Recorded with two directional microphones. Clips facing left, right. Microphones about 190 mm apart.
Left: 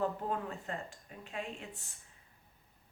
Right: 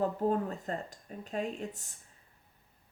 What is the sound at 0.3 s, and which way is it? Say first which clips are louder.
Speech: right 7 dB; 40° right (ahead or behind).